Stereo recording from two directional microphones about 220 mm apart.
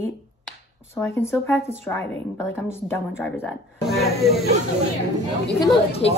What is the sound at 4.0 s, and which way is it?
Speech, centre (ahead or behind).